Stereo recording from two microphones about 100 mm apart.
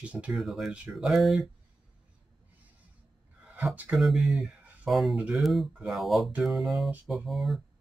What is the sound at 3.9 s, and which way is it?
Speech, centre (ahead or behind).